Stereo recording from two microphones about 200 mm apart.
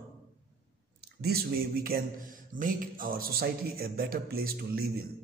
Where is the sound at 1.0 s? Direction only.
50° right (ahead or behind).